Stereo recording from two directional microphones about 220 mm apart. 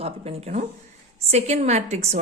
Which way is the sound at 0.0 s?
30° right (ahead or behind).